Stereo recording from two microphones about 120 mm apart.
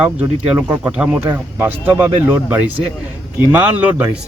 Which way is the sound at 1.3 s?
20° right (ahead or behind).